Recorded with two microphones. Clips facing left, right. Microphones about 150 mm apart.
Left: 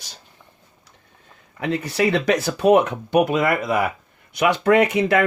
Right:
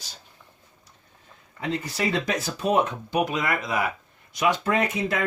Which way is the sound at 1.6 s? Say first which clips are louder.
Left 6 dB; 65° left (ahead or behind).